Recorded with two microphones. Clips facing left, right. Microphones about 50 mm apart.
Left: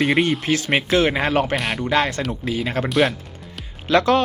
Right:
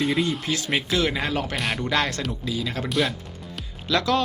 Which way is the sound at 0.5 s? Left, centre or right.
Left.